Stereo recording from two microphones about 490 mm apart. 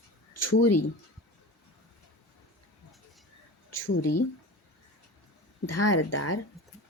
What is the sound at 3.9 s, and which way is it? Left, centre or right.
Speech, left.